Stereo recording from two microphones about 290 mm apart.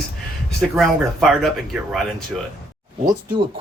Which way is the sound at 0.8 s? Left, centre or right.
Centre.